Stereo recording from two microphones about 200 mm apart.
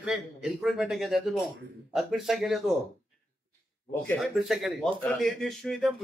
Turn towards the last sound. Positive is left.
turn(degrees=0)  # may be behind; listen again after turning